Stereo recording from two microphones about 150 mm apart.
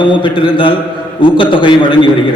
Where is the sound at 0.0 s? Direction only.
30° left (ahead or behind).